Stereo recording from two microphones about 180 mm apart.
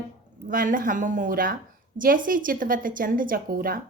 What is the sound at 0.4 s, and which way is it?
Speech, 50° right (ahead or behind).